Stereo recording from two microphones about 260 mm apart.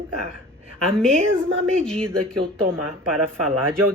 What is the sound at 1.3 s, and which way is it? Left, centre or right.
Speech, right.